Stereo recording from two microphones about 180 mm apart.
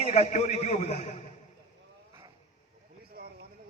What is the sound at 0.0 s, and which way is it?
Speech, 40° left (ahead or behind).